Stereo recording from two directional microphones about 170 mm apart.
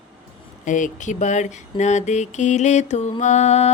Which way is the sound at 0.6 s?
45° left (ahead or behind).